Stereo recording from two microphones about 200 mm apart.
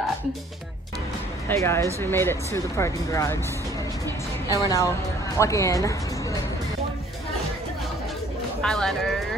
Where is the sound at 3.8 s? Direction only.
15° left (ahead or behind).